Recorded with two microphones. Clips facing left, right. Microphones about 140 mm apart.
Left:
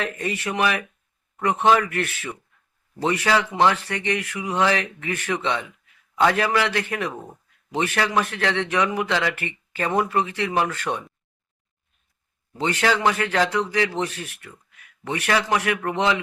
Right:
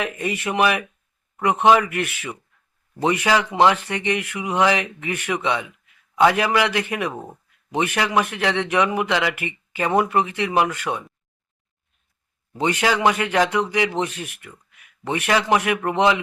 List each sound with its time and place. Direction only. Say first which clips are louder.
0.0 s a man's voice: right 2 dB; 15° right (ahead or behind)
12.5 s a man's voice: right 1 dB; 15° right (ahead or behind)